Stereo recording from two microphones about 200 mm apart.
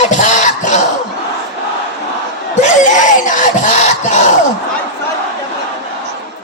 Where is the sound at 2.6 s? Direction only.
40° left (ahead or behind).